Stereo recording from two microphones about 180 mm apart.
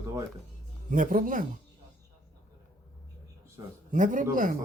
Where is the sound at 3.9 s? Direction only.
45° right (ahead or behind).